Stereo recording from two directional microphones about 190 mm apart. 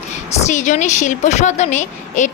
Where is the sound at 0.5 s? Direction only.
40° left (ahead or behind).